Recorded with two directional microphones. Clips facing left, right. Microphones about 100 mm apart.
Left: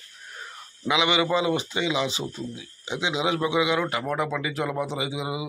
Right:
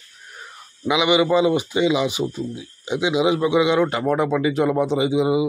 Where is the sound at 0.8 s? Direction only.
15° right (ahead or behind).